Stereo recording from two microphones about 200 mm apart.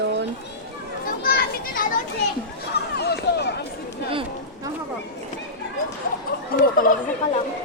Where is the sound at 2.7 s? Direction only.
55° left (ahead or behind).